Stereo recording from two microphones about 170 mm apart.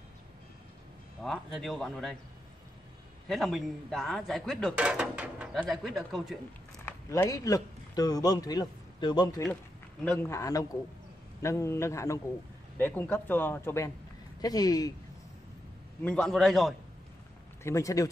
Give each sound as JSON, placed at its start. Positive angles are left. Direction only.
{"t": 1.2, "sound": "speech", "side_deg": 0}
{"t": 3.3, "sound": "speech", "side_deg": 0}
{"t": 6.9, "sound": "a man's voice", "side_deg": 15}
{"t": 10.0, "sound": "a man's voice", "side_deg": 5}
{"t": 10.3, "sound": "a man's voice", "side_deg": 20}
{"t": 16.0, "sound": "speech", "side_deg": 5}
{"t": 17.6, "sound": "speech", "side_deg": 20}